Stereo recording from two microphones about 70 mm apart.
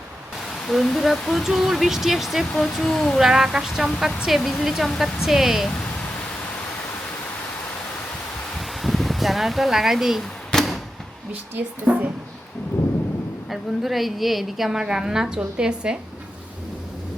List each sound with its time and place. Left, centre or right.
0.7 s speech: centre
8.5 s a sound: centre
11.3 s speech: right
13.5 s a woman's voice: centre